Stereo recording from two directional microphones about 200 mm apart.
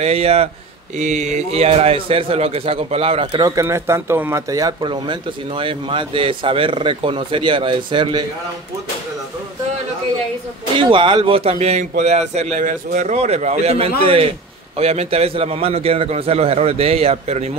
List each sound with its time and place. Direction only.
0.0 s a man's voice: 30° right (ahead or behind)
10.7 s a man's voice: 25° right (ahead or behind)